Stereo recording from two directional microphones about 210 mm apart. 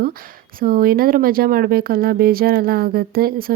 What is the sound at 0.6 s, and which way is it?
Speech, 45° right (ahead or behind).